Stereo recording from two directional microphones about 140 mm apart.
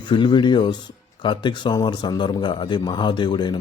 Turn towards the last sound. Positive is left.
turn(degrees=30)  # may be behind; listen again after turning